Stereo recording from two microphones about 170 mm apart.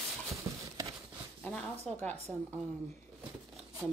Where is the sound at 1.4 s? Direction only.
5° left (ahead or behind).